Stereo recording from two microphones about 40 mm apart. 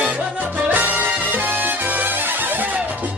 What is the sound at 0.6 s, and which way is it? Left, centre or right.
Music, right.